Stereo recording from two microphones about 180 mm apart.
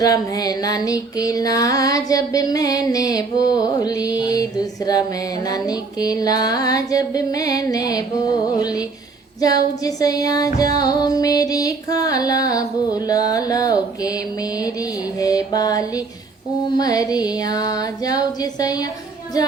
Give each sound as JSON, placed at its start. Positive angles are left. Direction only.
{"t": 0.0, "sound": "music", "side_deg": 20}